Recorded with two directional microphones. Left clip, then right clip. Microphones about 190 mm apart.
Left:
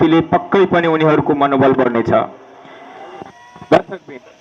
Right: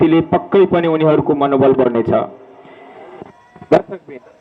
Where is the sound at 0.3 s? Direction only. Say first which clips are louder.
Even; 40° left (ahead or behind).